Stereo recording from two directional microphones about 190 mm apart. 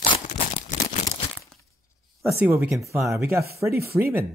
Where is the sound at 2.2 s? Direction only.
10° right (ahead or behind).